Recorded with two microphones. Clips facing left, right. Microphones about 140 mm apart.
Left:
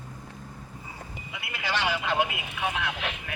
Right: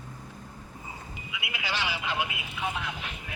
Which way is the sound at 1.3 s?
45° left (ahead or behind).